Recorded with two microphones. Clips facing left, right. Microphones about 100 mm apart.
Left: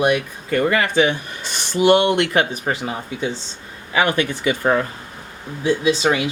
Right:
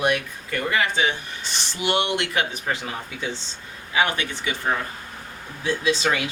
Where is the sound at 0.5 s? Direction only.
45° left (ahead or behind).